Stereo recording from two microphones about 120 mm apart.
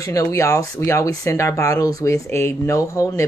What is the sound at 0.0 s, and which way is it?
Speech, 25° left (ahead or behind).